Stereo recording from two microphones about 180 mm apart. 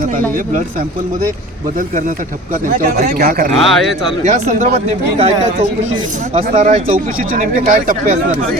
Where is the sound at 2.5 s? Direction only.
50° right (ahead or behind).